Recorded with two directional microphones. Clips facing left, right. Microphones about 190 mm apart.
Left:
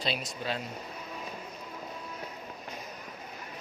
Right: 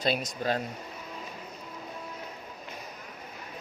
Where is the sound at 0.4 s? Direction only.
45° right (ahead or behind).